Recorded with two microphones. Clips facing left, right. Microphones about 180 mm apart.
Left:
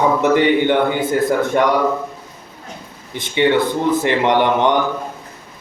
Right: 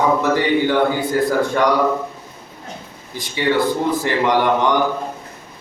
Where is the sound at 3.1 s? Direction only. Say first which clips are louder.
Left 3 dB; 25° left (ahead or behind).